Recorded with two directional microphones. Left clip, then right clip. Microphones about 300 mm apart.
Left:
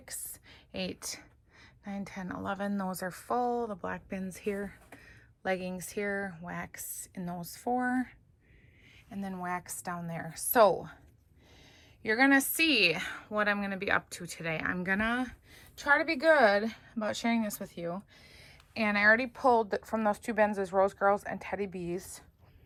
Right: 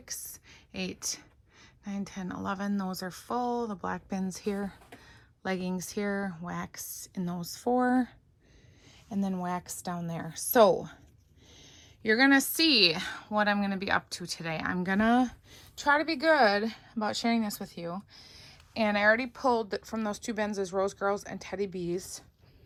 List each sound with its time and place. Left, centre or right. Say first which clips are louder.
0.0 s a woman's voice: right 4 dB; centre